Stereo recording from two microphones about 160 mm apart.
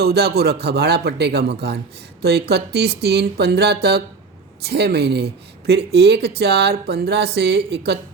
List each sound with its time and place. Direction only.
0.0 s speech: 85° right